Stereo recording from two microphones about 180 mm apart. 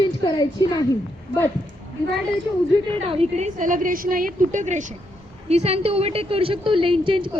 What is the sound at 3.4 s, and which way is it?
A woman's voice, 45° right (ahead or behind).